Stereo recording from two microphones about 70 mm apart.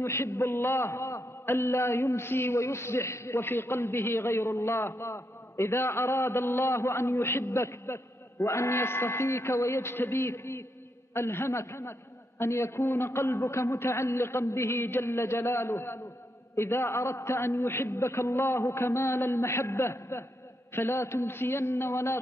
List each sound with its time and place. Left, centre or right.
0.0 s a man's voice: left